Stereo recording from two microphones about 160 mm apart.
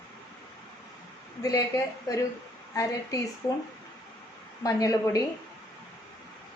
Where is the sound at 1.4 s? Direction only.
20° left (ahead or behind).